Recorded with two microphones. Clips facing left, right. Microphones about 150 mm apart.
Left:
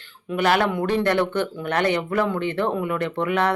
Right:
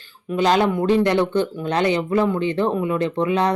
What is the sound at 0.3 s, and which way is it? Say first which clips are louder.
Speech: right 3 dB; 15° right (ahead or behind).